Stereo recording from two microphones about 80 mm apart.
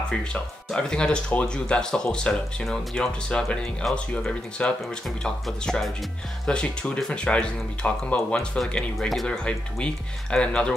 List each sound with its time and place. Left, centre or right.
0.7 s speech: centre